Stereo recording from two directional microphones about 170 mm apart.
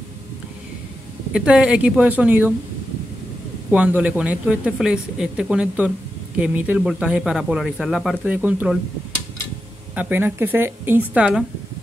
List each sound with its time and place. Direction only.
1.3 s speech: 5° right (ahead or behind)
3.7 s speech: 10° right (ahead or behind)
9.9 s speech: 10° right (ahead or behind)